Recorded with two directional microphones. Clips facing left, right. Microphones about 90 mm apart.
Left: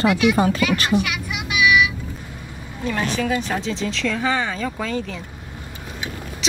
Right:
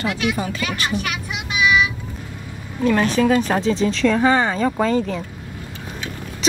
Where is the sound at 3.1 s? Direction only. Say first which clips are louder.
Right 5 dB; 40° right (ahead or behind).